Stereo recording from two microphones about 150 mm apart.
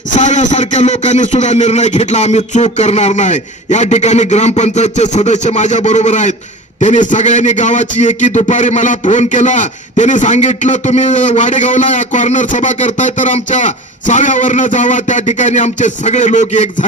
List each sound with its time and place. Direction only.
0.1 s a man's voice: 55° left (ahead or behind)